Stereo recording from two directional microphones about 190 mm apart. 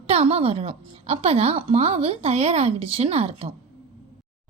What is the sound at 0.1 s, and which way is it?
A woman's voice, 30° right (ahead or behind).